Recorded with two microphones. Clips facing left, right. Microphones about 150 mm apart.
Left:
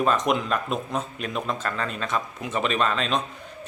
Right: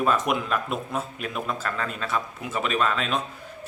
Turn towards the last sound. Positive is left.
turn(degrees=-5)  # may be behind; listen again after turning